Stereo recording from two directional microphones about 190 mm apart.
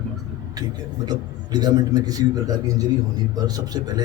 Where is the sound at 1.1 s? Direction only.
20° right (ahead or behind).